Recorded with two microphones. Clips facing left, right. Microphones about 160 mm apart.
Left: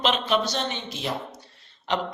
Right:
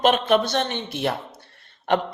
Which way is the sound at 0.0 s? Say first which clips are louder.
Right 5 dB; 50° right (ahead or behind).